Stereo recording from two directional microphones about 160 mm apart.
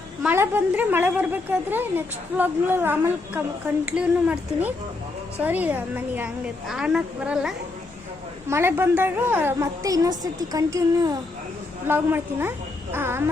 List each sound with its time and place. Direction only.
0.2 s a woman's voice: 10° right (ahead or behind)
8.4 s a woman's voice: 15° right (ahead or behind)